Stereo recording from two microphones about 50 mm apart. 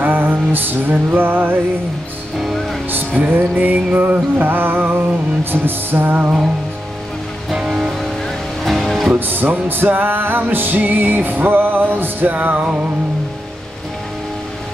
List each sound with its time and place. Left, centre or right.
0.0 s music: right
2.3 s music: centre
3.2 s music: right
7.5 s music: centre
8.6 s music: centre
9.1 s music: right